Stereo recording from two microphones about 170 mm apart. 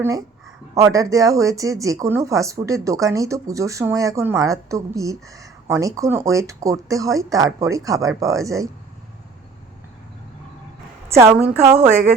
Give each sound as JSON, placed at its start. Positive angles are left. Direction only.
{"t": 0.0, "sound": "speech", "side_deg": -20}
{"t": 11.2, "sound": "a woman's voice", "side_deg": -10}